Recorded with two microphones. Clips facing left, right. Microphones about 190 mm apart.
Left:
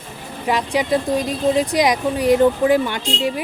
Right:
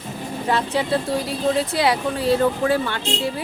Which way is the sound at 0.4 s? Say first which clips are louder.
Left 2 dB; 15° left (ahead or behind).